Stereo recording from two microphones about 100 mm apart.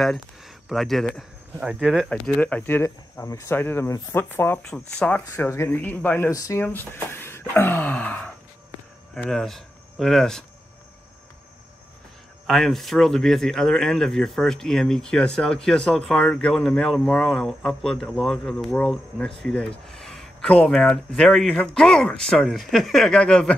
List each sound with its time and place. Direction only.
0.0 s speech: centre (ahead or behind)
1.6 s speech: 10° right (ahead or behind)
2.0 s speech: 10° left (ahead or behind)
4.6 s speech: 10° left (ahead or behind)
6.3 s speech: 35° left (ahead or behind)
6.9 s speech: 25° left (ahead or behind)
9.3 s speech: 5° left (ahead or behind)
12.4 s speech: 5° left (ahead or behind)
17.3 s speech: centre (ahead or behind)